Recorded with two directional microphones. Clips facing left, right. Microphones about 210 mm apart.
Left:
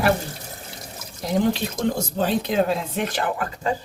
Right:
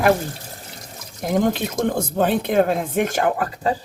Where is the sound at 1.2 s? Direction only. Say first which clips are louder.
Right 2 dB; 50° right (ahead or behind).